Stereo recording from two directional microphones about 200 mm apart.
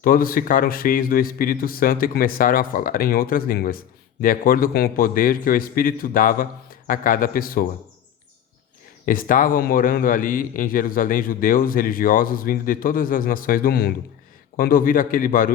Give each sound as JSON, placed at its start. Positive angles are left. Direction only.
{"t": 0.0, "sound": "a man's voice", "side_deg": 45}
{"t": 9.0, "sound": "a man's voice", "side_deg": 45}